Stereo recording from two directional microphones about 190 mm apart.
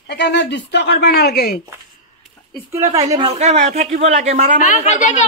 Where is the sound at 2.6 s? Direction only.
15° right (ahead or behind).